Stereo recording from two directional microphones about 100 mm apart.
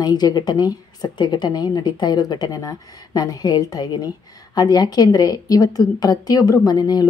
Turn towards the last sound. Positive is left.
turn(degrees=40)  # may be behind; listen again after turning